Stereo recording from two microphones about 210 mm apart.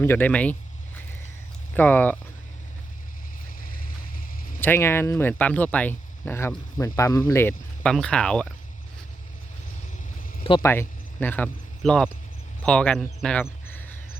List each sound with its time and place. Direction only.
0.0 s speech: 10° left (ahead or behind)
1.7 s speech: 10° left (ahead or behind)
3.6 s vehicle: 45° left (ahead or behind)
4.6 s speech: 10° left (ahead or behind)
10.6 s speech: 10° left (ahead or behind)
12.6 s a sound: 5° left (ahead or behind)